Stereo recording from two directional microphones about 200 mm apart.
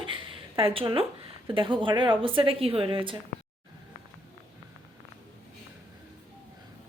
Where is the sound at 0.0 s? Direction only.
25° right (ahead or behind).